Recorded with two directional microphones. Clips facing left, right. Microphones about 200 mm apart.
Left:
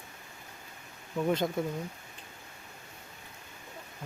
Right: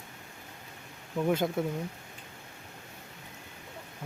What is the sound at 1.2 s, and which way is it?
Speech, 5° right (ahead or behind).